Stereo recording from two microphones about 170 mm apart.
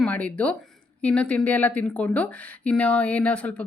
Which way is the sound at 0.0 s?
10° left (ahead or behind).